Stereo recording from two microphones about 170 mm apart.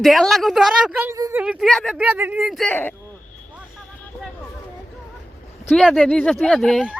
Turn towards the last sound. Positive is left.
turn(degrees=-5)  # may be behind; listen again after turning